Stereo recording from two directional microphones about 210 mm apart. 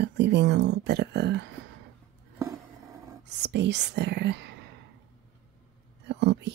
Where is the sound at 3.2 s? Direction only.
55° right (ahead or behind).